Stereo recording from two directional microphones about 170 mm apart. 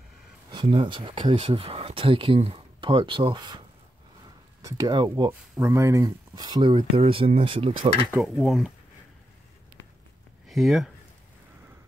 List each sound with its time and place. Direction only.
0.5 s speech: 30° right (ahead or behind)
8.2 s speech: centre (ahead or behind)
10.5 s speech: centre (ahead or behind)